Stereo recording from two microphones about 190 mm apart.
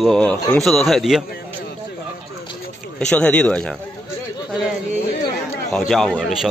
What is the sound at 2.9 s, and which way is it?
Speech, 5° left (ahead or behind).